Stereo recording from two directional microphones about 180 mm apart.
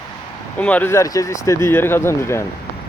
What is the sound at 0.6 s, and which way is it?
Speech, 10° left (ahead or behind).